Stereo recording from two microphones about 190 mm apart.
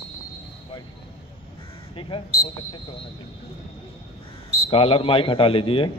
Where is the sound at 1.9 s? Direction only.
25° left (ahead or behind).